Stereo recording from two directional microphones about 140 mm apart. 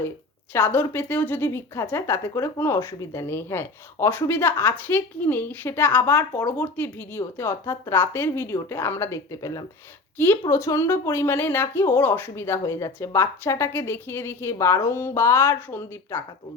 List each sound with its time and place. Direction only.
0.5 s a woman's voice: 15° left (ahead or behind)
10.2 s a woman's voice: 10° left (ahead or behind)